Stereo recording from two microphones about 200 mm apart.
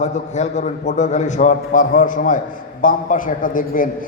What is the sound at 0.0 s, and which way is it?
A man's voice, 35° left (ahead or behind).